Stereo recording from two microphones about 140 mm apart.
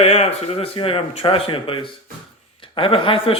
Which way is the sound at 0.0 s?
45° left (ahead or behind).